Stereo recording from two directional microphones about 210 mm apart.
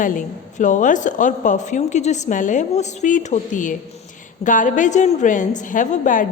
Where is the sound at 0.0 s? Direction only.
40° left (ahead or behind).